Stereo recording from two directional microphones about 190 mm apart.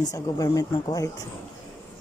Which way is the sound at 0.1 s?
20° left (ahead or behind).